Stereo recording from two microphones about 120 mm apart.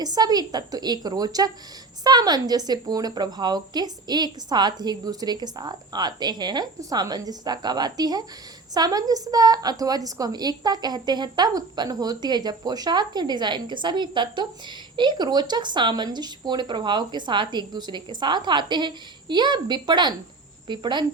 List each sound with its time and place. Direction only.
0.0 s a woman's voice: 35° right (ahead or behind)